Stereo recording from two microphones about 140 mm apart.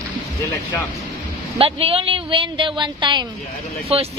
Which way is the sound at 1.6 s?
40° right (ahead or behind).